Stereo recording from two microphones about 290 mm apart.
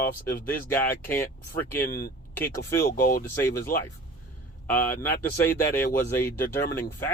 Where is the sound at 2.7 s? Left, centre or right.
Centre.